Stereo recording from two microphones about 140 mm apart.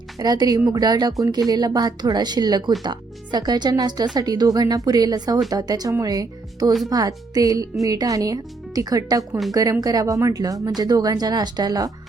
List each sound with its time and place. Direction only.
0.2 s speech: 30° right (ahead or behind)